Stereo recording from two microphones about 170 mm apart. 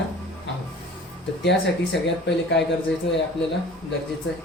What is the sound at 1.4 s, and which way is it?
Speech, 90° left.